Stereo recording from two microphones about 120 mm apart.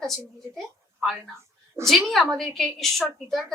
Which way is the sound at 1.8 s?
25° right (ahead or behind).